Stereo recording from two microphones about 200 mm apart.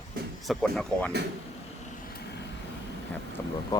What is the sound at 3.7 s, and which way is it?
Speech, 20° left (ahead or behind).